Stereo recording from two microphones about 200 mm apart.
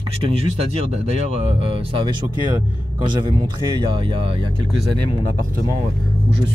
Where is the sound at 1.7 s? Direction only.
25° right (ahead or behind).